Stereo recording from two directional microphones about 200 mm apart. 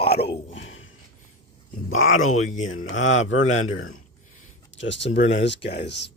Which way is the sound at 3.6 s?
90° left.